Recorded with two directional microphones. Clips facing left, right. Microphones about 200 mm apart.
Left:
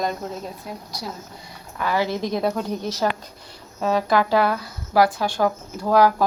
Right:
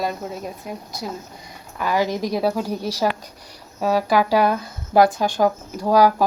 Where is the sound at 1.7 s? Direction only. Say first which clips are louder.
Right 2 dB; 15° right (ahead or behind).